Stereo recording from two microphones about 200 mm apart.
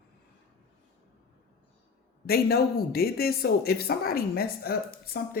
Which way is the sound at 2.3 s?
50° left (ahead or behind).